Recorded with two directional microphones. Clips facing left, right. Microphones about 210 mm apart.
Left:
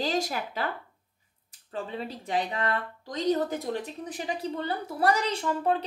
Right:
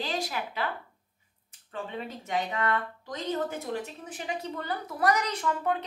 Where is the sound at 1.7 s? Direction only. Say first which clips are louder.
Left 2 dB; 35° left (ahead or behind).